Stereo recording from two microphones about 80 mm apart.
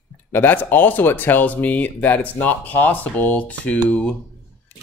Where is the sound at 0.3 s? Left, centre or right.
Left.